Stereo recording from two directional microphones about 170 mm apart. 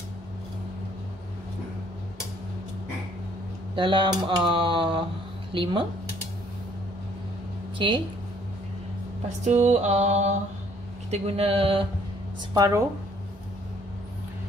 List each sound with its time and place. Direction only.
3.7 s speech: 30° right (ahead or behind)
7.8 s speech: 30° right (ahead or behind)
9.4 s mantra: 45° right (ahead or behind)
12.5 s speech: 20° right (ahead or behind)